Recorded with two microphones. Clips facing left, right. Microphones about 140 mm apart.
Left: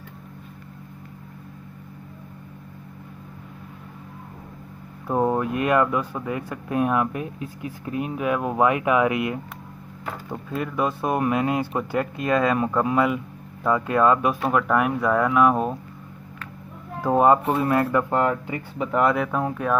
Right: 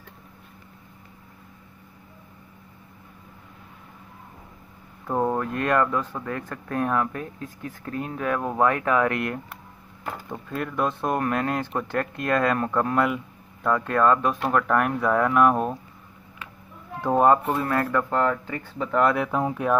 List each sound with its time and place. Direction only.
5.0 s speech: 5° left (ahead or behind)
17.0 s speech: 5° left (ahead or behind)
17.6 s speech: 20° left (ahead or behind)
19.1 s speech: 5° right (ahead or behind)